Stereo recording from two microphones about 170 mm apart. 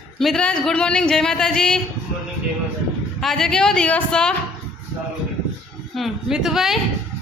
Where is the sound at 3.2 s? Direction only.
Centre (ahead or behind).